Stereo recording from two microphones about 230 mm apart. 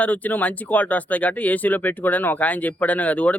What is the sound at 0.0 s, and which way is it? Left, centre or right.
Speech, centre.